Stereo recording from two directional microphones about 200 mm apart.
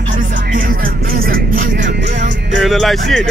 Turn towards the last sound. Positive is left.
turn(degrees=0)  # may be behind; listen again after turning